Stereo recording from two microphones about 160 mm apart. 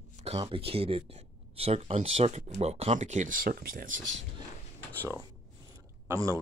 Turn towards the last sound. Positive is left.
turn(degrees=-20)  # may be behind; listen again after turning